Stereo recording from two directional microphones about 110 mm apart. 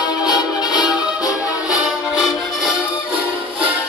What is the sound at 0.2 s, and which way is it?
Music, 35° left (ahead or behind).